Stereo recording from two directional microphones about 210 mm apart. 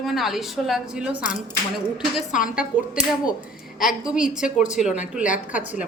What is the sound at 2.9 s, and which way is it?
A woman's voice, 5° right (ahead or behind).